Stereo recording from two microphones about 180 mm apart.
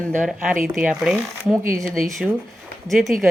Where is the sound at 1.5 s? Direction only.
15° right (ahead or behind).